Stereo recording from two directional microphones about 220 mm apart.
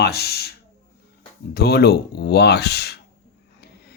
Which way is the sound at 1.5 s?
45° left (ahead or behind).